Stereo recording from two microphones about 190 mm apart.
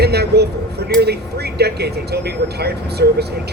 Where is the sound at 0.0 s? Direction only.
60° right (ahead or behind).